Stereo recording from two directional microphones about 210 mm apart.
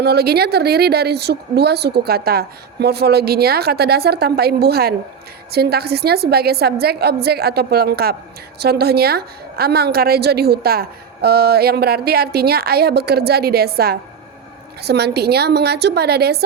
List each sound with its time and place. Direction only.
0.0 s a woman's voice: 50° right (ahead or behind)